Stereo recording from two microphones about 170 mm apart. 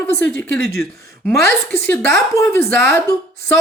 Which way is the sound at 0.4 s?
15° left (ahead or behind).